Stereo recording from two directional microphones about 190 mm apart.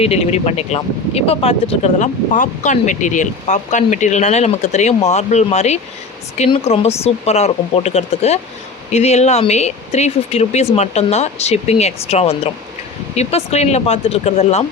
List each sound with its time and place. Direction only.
0.0 s speech: 35° left (ahead or behind)